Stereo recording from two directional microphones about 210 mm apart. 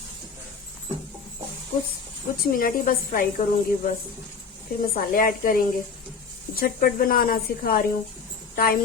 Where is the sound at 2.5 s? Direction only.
40° left (ahead or behind).